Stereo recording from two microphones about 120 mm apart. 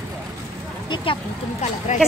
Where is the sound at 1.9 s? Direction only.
90° left.